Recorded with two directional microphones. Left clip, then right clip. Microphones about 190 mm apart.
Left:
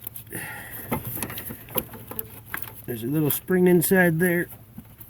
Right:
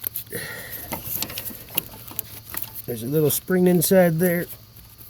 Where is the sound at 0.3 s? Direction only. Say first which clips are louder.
Right 2 dB; 45° right (ahead or behind).